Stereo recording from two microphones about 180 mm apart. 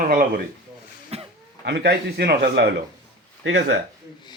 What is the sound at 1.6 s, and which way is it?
A man's voice, 70° right (ahead or behind).